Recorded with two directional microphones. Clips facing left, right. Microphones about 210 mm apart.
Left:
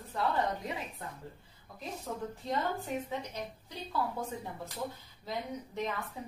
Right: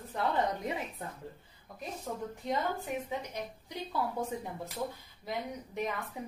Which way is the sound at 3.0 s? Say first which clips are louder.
Right 1 dB; 15° right (ahead or behind).